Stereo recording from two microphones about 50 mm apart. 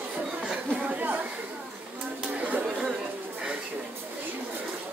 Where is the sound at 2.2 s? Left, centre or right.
Right.